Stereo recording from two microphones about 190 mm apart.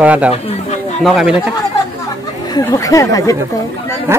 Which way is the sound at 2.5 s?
15° left (ahead or behind).